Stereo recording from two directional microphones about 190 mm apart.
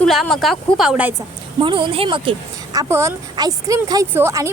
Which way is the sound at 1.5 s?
25° right (ahead or behind).